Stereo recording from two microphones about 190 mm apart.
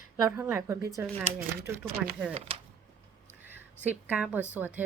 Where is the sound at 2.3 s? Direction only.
30° right (ahead or behind).